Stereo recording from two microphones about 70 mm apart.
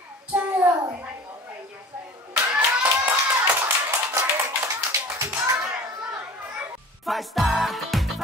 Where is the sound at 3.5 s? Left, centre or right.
Right.